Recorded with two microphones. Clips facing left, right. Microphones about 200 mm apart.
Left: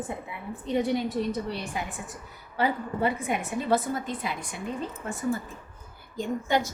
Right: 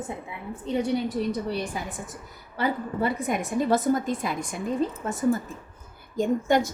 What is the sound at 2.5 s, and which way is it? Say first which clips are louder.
Speech: right 1 dB; 40° right (ahead or behind).